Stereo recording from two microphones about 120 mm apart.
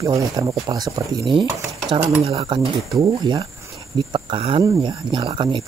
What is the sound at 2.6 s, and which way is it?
Speech, 40° right (ahead or behind).